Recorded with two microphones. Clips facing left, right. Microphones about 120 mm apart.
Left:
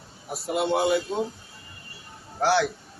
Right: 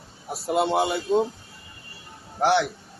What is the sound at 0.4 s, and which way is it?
Speech, 30° right (ahead or behind).